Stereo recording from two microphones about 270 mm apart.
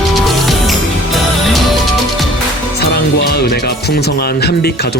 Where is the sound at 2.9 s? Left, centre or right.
Left.